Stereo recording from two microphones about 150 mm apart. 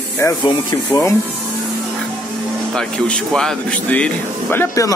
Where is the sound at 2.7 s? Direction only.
5° left (ahead or behind).